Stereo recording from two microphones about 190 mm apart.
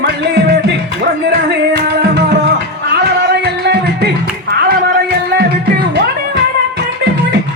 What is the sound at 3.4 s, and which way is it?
Music, 60° right (ahead or behind).